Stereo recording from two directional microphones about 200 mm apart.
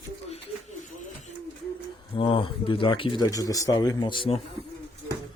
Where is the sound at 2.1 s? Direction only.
25° left (ahead or behind).